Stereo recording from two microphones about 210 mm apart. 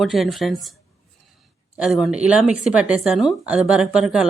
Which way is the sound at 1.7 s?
Centre (ahead or behind).